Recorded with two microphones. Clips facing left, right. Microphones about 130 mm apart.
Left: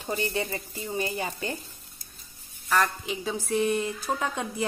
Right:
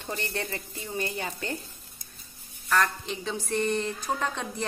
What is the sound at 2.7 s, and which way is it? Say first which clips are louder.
A woman's voice: left 1 dB; 5° left (ahead or behind).